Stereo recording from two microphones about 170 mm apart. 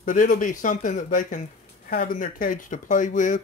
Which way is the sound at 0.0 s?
50° left (ahead or behind).